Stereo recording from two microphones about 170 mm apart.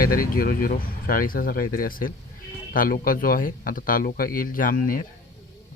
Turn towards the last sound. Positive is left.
turn(degrees=55)  # may be behind; listen again after turning